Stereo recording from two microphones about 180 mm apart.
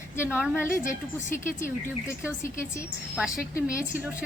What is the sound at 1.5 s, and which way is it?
Speech, 15° left (ahead or behind).